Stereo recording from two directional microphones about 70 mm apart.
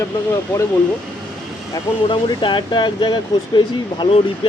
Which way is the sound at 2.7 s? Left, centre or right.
Left.